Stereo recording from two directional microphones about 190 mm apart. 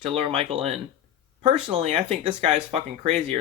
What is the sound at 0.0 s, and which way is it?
Speech, 30° right (ahead or behind).